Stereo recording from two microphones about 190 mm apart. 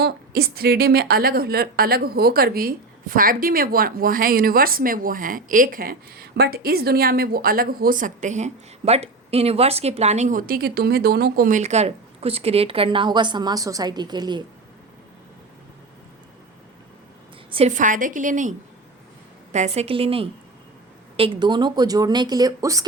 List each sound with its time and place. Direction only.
0.0 s a woman's voice: 55° right (ahead or behind); by 14.4 s 20° right (ahead or behind)
17.7 s a woman's voice: 45° right (ahead or behind); by 22.9 s 20° right (ahead or behind)